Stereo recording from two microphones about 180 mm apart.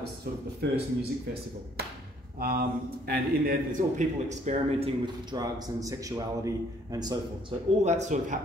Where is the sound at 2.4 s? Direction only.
55° right (ahead or behind).